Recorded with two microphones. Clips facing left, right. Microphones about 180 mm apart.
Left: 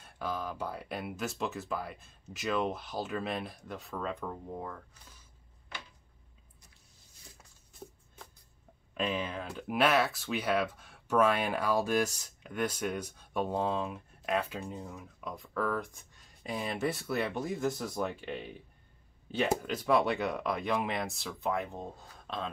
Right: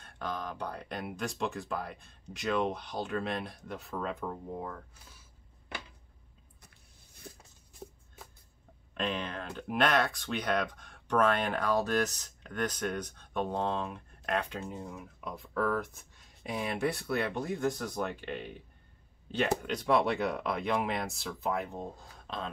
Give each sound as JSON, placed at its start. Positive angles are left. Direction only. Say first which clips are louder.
{"t": 0.0, "sound": "speech", "louder": "left 1 dB", "side_deg": 5}
{"t": 7.3, "sound": "a sound", "louder": "right 9 dB", "side_deg": -55}
{"t": 8.9, "sound": "speech", "louder": "left 1 dB", "side_deg": 5}